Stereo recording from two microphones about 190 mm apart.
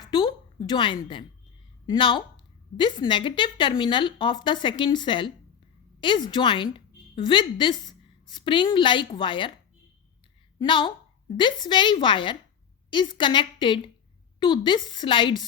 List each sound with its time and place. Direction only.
0.1 s a woman's voice: 25° left (ahead or behind)
10.6 s a woman's voice: 25° left (ahead or behind)